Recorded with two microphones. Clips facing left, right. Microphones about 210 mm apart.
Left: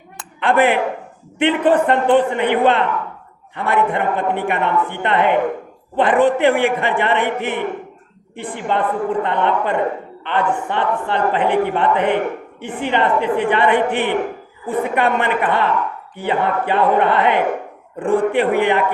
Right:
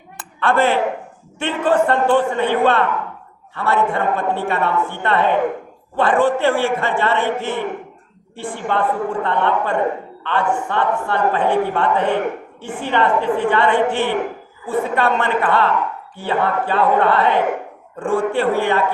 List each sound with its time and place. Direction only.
0.3 s a woman's voice: 15° left (ahead or behind)